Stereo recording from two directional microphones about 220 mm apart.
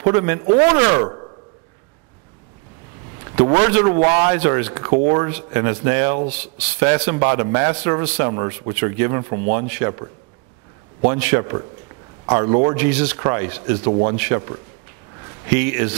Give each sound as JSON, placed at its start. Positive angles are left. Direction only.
{"t": 0.0, "sound": "a man's voice", "side_deg": -20}
{"t": 3.7, "sound": "a man's voice", "side_deg": -20}
{"t": 15.5, "sound": "speech", "side_deg": -15}